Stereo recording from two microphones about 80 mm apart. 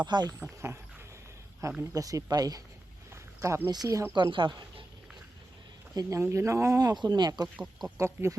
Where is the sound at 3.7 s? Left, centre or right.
Right.